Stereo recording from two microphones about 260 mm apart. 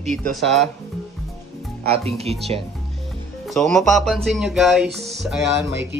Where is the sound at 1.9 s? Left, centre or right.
Right.